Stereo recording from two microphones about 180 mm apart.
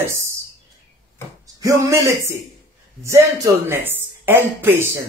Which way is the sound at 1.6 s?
20° right (ahead or behind).